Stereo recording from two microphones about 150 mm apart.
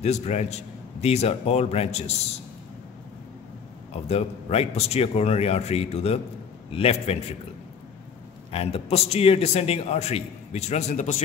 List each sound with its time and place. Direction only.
0.0 s a man's voice: 50° left (ahead or behind)
3.9 s a man's voice: 40° left (ahead or behind)
8.5 s a man's voice: 40° left (ahead or behind)